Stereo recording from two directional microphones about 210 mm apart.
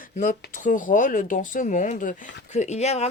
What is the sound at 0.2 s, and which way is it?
Speech, 40° left (ahead or behind).